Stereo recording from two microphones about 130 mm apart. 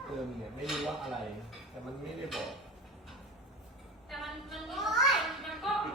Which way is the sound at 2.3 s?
Centre (ahead or behind).